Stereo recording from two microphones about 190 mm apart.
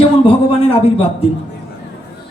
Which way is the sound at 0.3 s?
30° left (ahead or behind).